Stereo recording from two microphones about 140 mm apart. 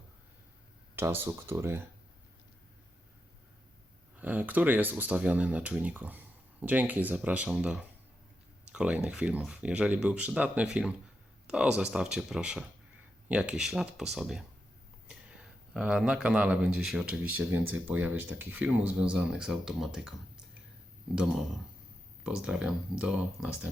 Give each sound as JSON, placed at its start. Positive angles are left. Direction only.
{"t": 0.9, "sound": "speech", "side_deg": -15}
{"t": 4.2, "sound": "speech", "side_deg": -10}